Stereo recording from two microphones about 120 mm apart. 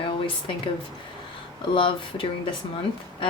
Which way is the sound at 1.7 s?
45° left (ahead or behind).